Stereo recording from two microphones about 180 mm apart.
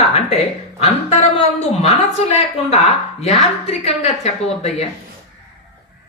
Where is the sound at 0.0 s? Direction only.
35° left (ahead or behind).